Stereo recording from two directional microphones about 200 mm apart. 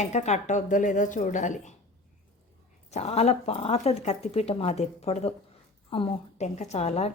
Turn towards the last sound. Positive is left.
turn(degrees=30)  # may be behind; listen again after turning